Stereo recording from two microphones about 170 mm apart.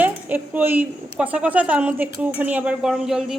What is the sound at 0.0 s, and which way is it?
Speech, 10° right (ahead or behind).